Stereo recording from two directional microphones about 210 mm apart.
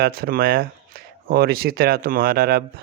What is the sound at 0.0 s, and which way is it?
Speech, 45° right (ahead or behind).